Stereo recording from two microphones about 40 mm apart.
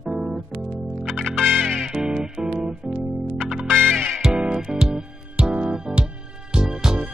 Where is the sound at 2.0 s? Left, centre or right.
Centre.